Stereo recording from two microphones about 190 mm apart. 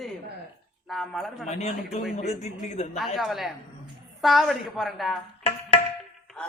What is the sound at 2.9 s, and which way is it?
A woman's voice, centre (ahead or behind).